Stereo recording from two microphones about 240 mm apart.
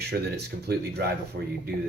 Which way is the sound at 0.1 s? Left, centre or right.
Right.